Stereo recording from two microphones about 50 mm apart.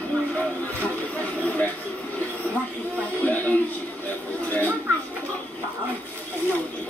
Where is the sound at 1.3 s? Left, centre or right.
Left.